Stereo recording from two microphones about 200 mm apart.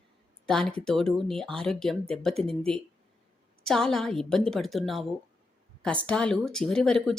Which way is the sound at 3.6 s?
Centre (ahead or behind).